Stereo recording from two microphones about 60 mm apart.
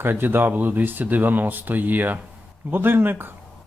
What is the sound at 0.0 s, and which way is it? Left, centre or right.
Speech, right.